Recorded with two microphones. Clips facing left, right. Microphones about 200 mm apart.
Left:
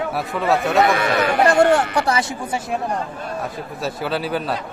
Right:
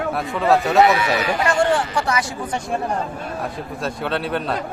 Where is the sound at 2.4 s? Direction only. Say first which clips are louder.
Even; 5° left (ahead or behind).